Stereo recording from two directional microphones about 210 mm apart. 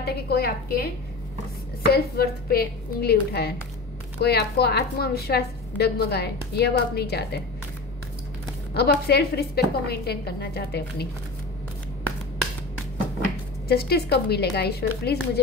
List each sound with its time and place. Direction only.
0.0 s a woman's voice: 50° left (ahead or behind)
8.7 s a woman's voice: 50° left (ahead or behind)
13.7 s a woman's voice: 50° left (ahead or behind)